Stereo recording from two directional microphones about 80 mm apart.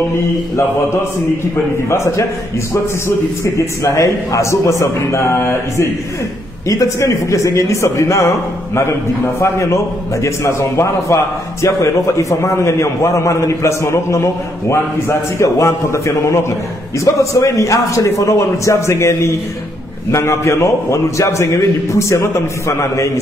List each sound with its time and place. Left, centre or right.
0.6 s a man's voice: left
3.5 s a man's voice: left
6.7 s a man's voice: left